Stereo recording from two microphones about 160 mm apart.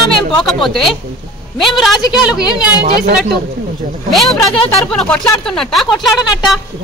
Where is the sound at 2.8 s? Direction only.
75° right (ahead or behind).